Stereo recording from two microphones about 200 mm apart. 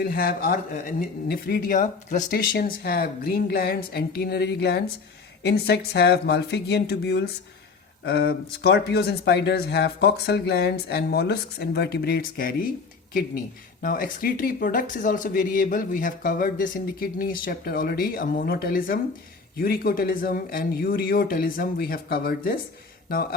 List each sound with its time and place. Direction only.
0.0 s speech: 50° left (ahead or behind)
13.8 s speech: 45° left (ahead or behind)